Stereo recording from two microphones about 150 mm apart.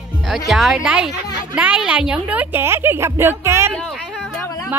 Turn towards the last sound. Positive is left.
turn(degrees=0)  # may be behind; listen again after turning